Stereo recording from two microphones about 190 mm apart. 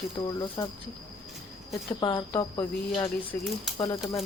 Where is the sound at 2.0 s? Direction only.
25° left (ahead or behind).